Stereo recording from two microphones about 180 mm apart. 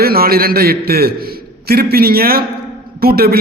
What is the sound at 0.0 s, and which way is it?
A man's voice, 55° right (ahead or behind).